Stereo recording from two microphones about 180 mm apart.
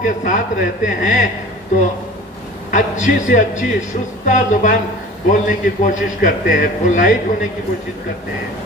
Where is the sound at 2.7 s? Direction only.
45° left (ahead or behind).